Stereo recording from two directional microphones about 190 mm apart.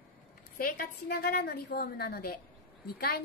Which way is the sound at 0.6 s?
50° left (ahead or behind).